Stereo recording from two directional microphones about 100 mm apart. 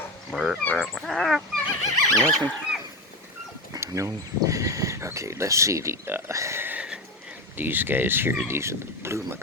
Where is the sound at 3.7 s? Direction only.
35° right (ahead or behind).